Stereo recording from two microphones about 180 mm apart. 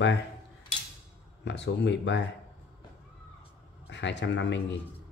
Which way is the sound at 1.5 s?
80° left.